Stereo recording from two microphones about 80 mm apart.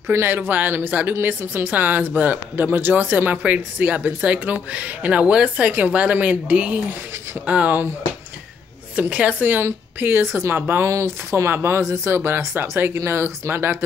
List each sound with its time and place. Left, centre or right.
0.1 s speech: right
8.9 s speech: centre